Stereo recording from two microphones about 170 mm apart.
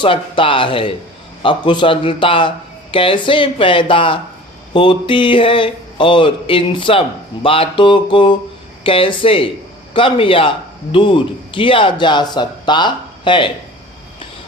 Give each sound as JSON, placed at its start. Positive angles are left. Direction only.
{"t": 0.0, "sound": "speech", "side_deg": 30}